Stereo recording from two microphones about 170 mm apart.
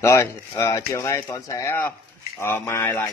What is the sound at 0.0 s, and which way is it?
A man's voice, 15° left (ahead or behind).